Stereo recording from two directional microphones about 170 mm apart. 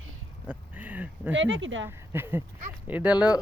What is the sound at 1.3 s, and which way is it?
Speech, 90° right.